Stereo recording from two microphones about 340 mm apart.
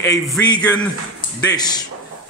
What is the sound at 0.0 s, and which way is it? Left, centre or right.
A man's voice, centre.